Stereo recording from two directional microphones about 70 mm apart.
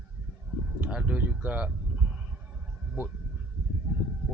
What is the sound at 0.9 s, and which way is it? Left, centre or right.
Speech, centre.